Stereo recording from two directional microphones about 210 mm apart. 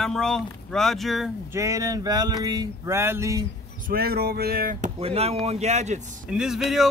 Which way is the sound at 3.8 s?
45° right (ahead or behind).